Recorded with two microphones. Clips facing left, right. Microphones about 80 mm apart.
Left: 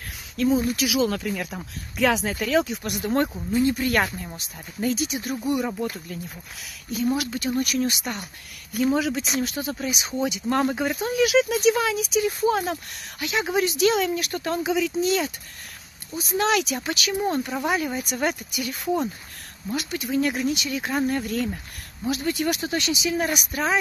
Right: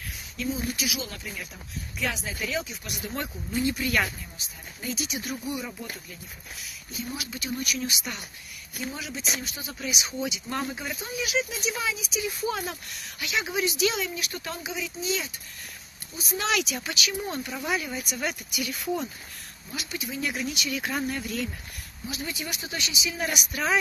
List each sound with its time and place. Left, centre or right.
0.4 s speech: left
5.0 s speech: left
5.4 s speech: left
6.6 s speech: left
7.2 s speech: left
8.7 s speech: left
11.1 s speech: left
12.4 s speech: left
15.0 s speech: left
16.3 s speech: left
19.7 s speech: left
20.3 s speech: left
21.1 s speech: left
22.0 s speech: left